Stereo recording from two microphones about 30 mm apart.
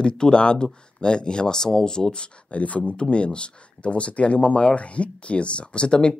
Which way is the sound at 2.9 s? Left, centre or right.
Left.